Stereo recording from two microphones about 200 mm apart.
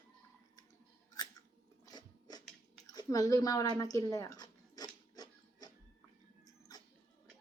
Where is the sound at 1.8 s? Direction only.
20° left (ahead or behind).